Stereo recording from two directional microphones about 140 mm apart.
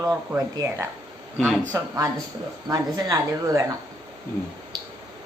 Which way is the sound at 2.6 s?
25° right (ahead or behind).